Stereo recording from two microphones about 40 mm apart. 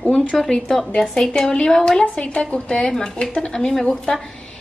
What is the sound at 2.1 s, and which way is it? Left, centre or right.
A woman's voice, left.